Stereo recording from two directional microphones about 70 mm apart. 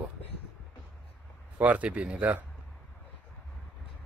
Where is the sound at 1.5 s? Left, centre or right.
Right.